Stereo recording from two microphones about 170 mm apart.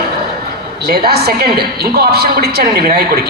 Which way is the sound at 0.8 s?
70° right (ahead or behind).